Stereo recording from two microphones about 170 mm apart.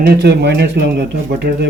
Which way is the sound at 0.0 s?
70° right (ahead or behind).